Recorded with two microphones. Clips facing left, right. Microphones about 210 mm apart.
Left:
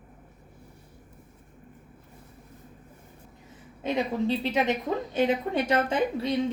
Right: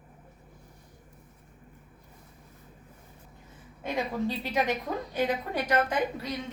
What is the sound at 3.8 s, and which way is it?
A woman's voice, 20° left (ahead or behind).